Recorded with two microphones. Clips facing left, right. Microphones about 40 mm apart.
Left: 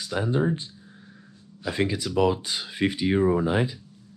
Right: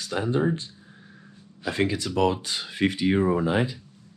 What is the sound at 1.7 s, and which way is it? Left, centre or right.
Speech, right.